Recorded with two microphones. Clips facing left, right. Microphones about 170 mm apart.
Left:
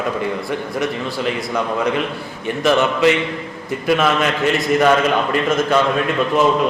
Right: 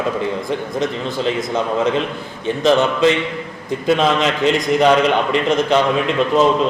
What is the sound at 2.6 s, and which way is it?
A man's voice, 20° right (ahead or behind).